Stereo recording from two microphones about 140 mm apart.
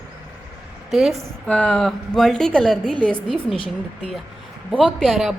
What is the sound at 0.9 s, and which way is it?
A woman's voice, centre (ahead or behind).